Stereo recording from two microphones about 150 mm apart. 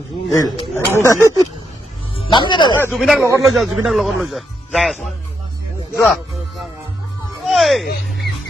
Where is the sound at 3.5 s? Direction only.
Centre (ahead or behind).